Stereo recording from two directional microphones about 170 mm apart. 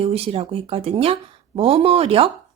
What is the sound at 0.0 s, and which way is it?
Speech, 35° right (ahead or behind).